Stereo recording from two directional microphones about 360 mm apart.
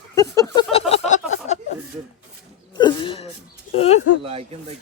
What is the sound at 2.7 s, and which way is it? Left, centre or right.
A man's voice, centre.